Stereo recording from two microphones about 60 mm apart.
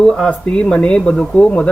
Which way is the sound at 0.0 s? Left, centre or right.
Centre.